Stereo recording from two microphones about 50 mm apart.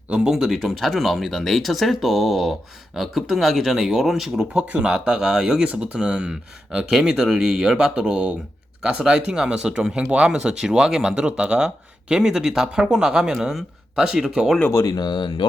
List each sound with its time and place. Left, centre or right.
0.3 s speech: centre
4.5 s speech: centre